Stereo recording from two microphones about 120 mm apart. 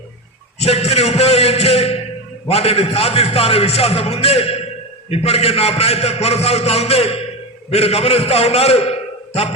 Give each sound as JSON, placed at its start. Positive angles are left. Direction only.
{"t": 0.6, "sound": "a man's voice", "side_deg": 60}